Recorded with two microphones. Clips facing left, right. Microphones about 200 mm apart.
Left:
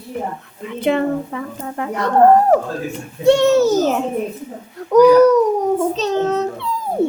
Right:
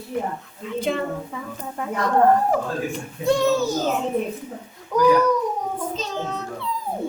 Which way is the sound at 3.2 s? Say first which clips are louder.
Left 7 dB; 75° left (ahead or behind).